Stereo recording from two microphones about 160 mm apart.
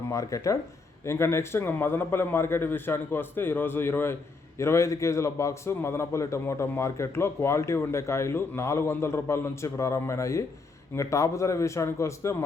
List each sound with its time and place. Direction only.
0.1 s a man's voice: 20° left (ahead or behind)